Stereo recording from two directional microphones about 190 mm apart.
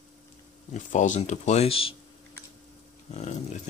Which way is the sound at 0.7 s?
40° left (ahead or behind).